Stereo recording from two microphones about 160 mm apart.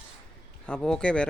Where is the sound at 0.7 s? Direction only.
5° left (ahead or behind).